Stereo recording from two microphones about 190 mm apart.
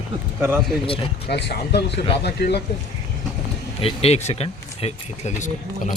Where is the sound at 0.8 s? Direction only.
30° left (ahead or behind).